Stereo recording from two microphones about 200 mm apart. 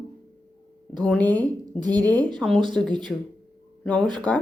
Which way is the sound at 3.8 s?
5° left (ahead or behind).